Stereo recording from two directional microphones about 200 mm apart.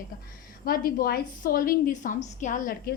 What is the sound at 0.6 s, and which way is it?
A woman's voice, 45° left (ahead or behind).